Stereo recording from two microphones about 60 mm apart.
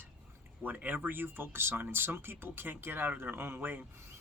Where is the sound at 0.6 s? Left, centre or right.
Right.